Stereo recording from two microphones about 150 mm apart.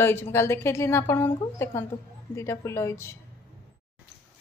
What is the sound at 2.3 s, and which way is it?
Speech, 20° left (ahead or behind).